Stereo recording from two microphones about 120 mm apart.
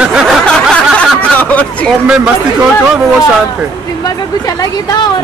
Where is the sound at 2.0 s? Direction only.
5° right (ahead or behind).